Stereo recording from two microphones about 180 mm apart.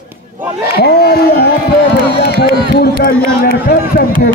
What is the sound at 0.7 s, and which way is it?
A man's voice, 65° left (ahead or behind).